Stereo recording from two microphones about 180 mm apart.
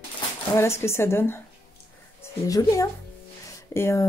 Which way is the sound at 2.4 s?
20° left (ahead or behind).